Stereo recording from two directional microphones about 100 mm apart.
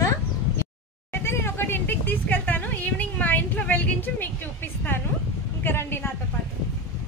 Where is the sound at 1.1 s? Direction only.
25° left (ahead or behind).